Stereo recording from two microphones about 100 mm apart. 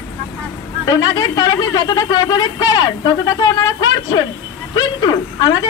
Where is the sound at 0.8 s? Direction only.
35° left (ahead or behind).